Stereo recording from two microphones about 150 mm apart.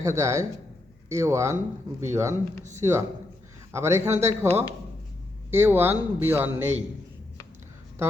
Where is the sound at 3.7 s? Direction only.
15° right (ahead or behind).